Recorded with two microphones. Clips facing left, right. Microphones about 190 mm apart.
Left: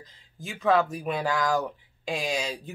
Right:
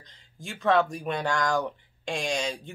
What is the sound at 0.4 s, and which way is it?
Speech, centre (ahead or behind).